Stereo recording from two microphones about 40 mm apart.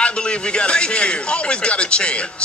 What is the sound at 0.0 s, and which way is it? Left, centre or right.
Speech, left.